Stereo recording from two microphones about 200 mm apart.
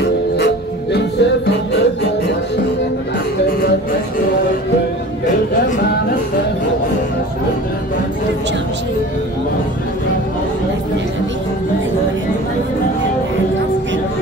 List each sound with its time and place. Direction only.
0.9 s music: 55° left (ahead or behind)